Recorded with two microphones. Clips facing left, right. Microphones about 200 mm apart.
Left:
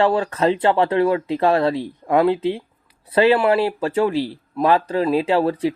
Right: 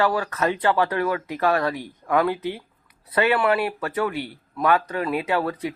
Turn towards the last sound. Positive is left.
turn(degrees=30)  # may be behind; listen again after turning